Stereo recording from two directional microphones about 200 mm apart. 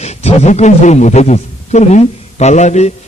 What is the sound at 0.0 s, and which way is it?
A man's voice, 35° left (ahead or behind).